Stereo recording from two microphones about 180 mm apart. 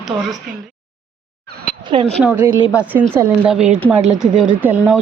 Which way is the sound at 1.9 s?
30° right (ahead or behind).